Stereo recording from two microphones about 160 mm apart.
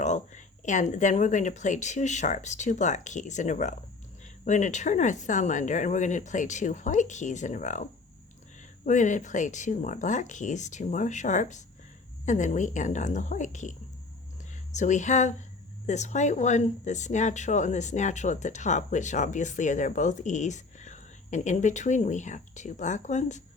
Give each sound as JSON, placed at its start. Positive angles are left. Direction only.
{"t": 0.0, "sound": "speech", "side_deg": 50}